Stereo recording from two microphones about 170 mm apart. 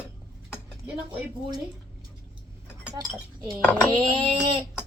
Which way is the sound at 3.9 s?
30° right (ahead or behind).